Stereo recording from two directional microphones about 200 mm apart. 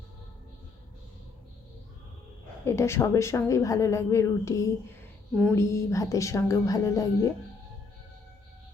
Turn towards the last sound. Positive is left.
turn(degrees=15)  # may be behind; listen again after turning